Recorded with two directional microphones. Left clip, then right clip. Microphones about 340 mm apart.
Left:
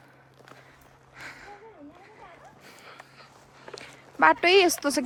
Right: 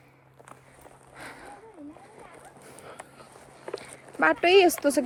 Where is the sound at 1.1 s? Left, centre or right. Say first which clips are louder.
Left 1 dB; centre.